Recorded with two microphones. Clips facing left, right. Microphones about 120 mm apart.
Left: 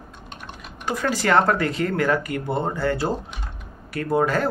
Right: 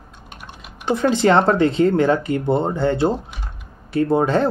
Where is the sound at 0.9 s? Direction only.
25° right (ahead or behind).